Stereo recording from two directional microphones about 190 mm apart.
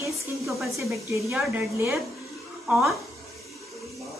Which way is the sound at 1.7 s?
15° right (ahead or behind).